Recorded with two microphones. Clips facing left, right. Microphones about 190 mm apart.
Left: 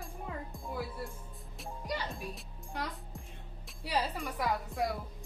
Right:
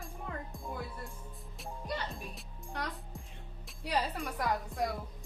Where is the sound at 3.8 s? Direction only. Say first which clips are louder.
Even; centre (ahead or behind).